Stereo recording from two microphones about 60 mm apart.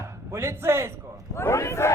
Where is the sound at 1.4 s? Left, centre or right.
Left.